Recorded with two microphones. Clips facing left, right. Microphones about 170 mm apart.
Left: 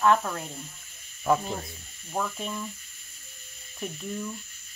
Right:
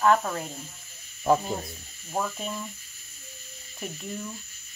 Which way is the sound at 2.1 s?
10° right (ahead or behind).